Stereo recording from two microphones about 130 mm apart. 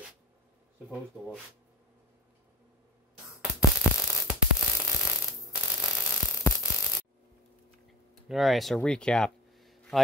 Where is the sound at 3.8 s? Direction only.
20° left (ahead or behind).